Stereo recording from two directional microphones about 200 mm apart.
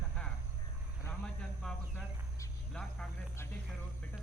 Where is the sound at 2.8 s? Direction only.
5° left (ahead or behind).